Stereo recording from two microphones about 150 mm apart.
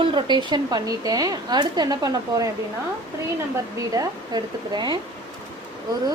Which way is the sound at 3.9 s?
30° right (ahead or behind).